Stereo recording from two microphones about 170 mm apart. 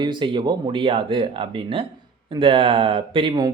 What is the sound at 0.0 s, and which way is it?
Speech, 25° right (ahead or behind).